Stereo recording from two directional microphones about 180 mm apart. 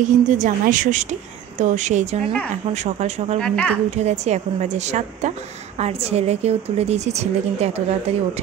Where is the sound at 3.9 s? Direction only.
40° right (ahead or behind).